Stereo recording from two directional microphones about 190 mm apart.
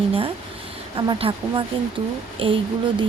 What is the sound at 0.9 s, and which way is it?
A woman's voice, 25° right (ahead or behind).